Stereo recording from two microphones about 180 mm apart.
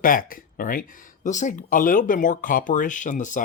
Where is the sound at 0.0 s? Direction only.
50° left (ahead or behind).